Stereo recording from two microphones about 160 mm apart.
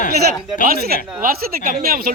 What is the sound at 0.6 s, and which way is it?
Speech, 65° right (ahead or behind).